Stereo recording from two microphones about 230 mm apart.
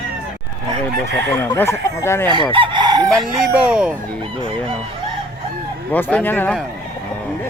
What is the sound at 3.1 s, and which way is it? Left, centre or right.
Speech, centre.